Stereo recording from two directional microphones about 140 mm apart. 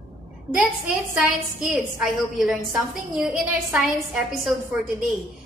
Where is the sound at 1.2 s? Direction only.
5° right (ahead or behind).